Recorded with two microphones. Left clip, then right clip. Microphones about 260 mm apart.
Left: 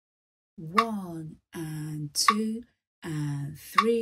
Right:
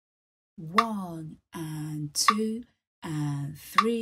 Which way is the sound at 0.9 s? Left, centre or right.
Centre.